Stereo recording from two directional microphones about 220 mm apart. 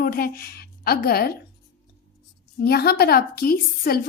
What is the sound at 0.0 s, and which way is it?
A woman's voice, 40° left (ahead or behind).